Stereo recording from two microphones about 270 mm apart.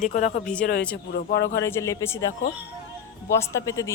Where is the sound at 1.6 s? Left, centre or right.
Centre.